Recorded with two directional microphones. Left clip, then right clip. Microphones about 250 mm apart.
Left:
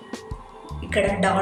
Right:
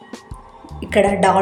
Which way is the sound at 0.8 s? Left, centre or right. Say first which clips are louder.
Right 5 dB; right.